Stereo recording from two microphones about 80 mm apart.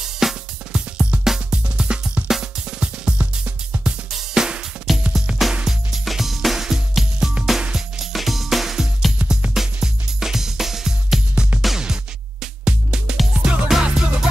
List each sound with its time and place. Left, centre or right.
0.2 s drum: centre
5.4 s music: centre
9.2 s music: centre
9.5 s music: centre